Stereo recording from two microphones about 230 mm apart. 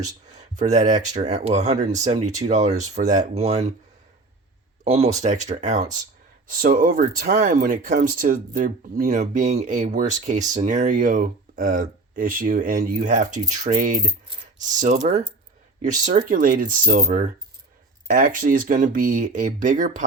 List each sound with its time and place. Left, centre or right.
0.3 s speech: right
4.8 s speech: right